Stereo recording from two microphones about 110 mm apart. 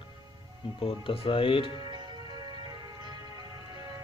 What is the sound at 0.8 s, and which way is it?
Speech, 55° left (ahead or behind).